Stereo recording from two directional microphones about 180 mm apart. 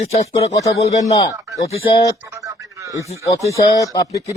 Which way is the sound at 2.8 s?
15° right (ahead or behind).